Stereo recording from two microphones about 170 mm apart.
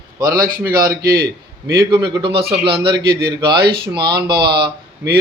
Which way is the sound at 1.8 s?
25° right (ahead or behind).